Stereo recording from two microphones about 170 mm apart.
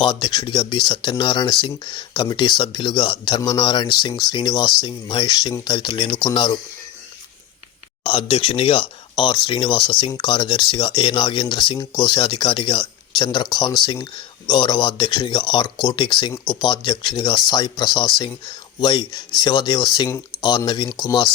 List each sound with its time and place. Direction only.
0.0 s speech: 25° left (ahead or behind)
8.0 s speech: 30° left (ahead or behind)